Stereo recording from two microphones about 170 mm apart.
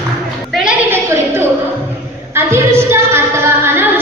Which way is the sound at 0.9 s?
15° right (ahead or behind).